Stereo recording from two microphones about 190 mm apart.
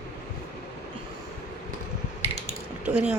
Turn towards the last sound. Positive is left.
turn(degrees=-5)  # may be behind; listen again after turning